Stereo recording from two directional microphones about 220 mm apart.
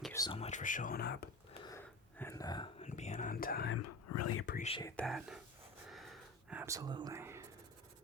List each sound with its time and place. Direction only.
0.1 s a sound: 15° left (ahead or behind)
0.3 s speech: 30° left (ahead or behind)
1.6 s a sound: 10° left (ahead or behind)
2.8 s whispering: 30° left (ahead or behind)
4.3 s speech: 75° left (ahead or behind)
4.5 s speech: 30° left (ahead or behind)
4.8 s speech: 15° left (ahead or behind)
5.0 s speech: centre (ahead or behind)
5.9 s whispering: centre (ahead or behind)